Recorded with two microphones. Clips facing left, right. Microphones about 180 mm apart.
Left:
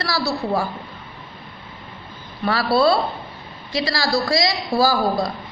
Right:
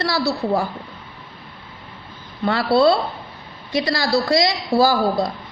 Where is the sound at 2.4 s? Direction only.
25° right (ahead or behind).